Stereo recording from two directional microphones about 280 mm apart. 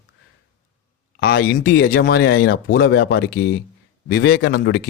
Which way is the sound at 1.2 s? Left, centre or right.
Left.